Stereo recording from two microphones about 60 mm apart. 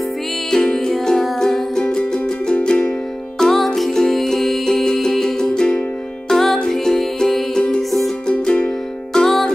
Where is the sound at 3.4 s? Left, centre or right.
Centre.